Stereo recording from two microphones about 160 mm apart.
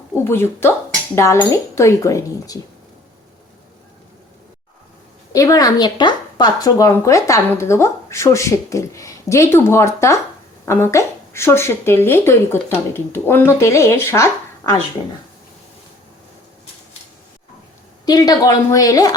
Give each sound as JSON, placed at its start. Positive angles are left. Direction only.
{"t": 0.1, "sound": "a woman's voice", "side_deg": 15}
{"t": 5.3, "sound": "a woman's voice", "side_deg": 20}
{"t": 18.0, "sound": "speech", "side_deg": 25}